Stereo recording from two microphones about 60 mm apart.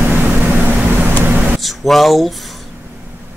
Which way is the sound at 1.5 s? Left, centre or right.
Centre.